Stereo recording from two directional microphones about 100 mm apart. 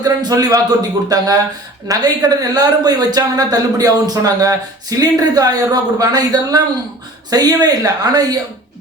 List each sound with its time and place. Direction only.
0.0 s speech: 40° right (ahead or behind)